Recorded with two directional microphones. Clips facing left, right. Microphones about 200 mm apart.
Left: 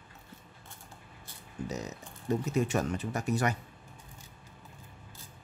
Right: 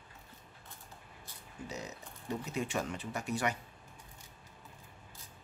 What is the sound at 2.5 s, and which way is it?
Speech, 45° left (ahead or behind).